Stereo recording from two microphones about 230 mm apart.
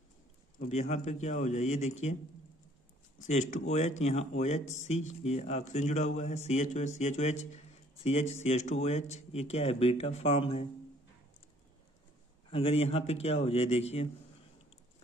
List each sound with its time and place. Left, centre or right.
0.6 s speech: left
3.3 s speech: left
12.4 s speech: left